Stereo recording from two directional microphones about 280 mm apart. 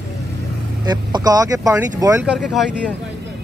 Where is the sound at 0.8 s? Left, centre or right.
Centre.